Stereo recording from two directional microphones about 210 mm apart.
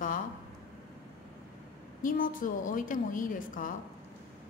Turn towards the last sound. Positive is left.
turn(degrees=40)  # may be behind; listen again after turning